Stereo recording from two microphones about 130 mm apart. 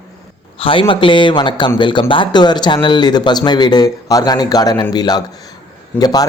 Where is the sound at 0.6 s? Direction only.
40° left (ahead or behind).